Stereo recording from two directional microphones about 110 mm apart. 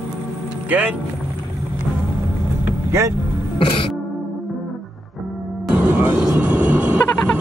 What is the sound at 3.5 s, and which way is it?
Music, 55° left (ahead or behind).